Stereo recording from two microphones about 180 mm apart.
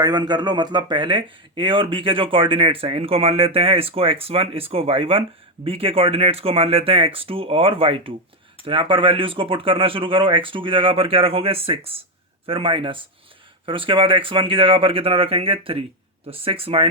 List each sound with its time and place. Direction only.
0.0 s speech: 25° right (ahead or behind)